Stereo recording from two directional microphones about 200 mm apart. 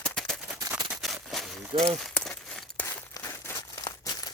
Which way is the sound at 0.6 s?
15° right (ahead or behind).